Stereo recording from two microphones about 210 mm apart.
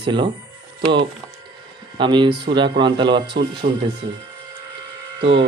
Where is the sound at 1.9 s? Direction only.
20° right (ahead or behind).